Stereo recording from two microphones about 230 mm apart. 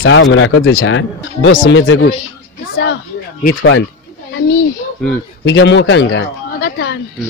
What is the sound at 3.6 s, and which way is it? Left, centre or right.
Speech, left.